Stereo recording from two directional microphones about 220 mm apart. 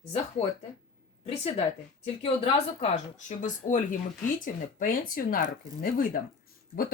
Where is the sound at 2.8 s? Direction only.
35° left (ahead or behind).